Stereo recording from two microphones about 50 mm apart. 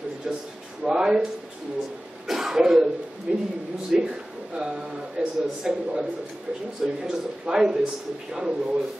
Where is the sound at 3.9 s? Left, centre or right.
Centre.